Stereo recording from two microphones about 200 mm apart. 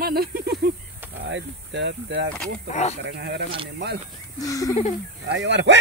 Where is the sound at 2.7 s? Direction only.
35° left (ahead or behind).